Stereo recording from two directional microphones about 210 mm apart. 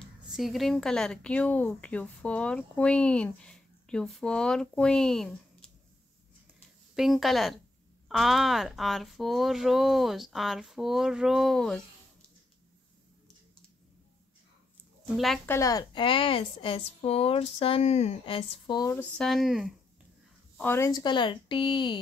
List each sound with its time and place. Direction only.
0.4 s speech: centre (ahead or behind)
7.0 s speech: centre (ahead or behind)
15.1 s a woman's voice: centre (ahead or behind)
20.5 s a woman's voice: 10° left (ahead or behind)